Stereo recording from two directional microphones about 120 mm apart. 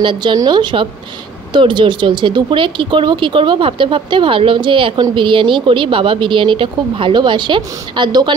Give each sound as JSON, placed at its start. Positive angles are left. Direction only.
{"t": 0.0, "sound": "a woman's voice", "side_deg": -40}